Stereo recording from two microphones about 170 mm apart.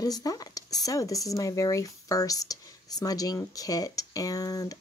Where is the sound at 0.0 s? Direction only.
20° left (ahead or behind).